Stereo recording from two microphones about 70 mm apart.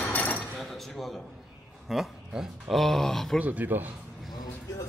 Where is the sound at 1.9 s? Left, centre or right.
Centre.